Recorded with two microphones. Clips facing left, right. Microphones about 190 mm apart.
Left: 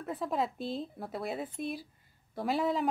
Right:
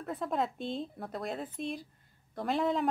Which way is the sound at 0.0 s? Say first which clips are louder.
Even; centre (ahead or behind).